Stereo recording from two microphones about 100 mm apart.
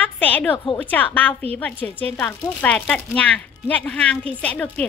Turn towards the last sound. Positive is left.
turn(degrees=15)  # may be behind; listen again after turning